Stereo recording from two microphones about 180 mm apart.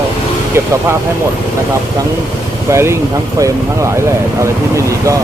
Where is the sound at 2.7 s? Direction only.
15° right (ahead or behind).